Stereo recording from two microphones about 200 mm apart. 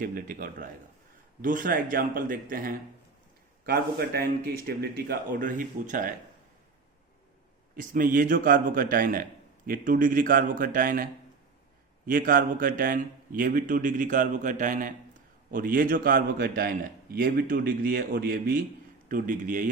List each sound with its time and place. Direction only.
0.0 s a man's voice: 45° right (ahead or behind)
7.8 s a man's voice: 40° right (ahead or behind)